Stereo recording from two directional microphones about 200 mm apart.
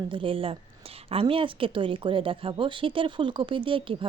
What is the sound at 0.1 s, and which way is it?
A woman's voice, 25° right (ahead or behind).